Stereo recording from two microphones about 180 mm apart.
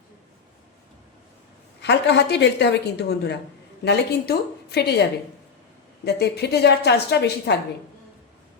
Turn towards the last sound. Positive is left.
turn(degrees=65)  # may be behind; listen again after turning